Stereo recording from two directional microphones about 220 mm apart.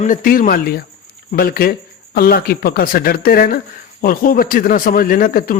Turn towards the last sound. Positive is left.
turn(degrees=40)  # may be behind; listen again after turning